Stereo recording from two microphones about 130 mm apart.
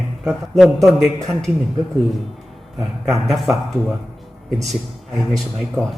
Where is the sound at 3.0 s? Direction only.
Centre (ahead or behind).